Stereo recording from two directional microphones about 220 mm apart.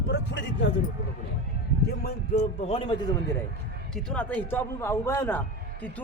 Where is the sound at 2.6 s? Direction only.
25° left (ahead or behind).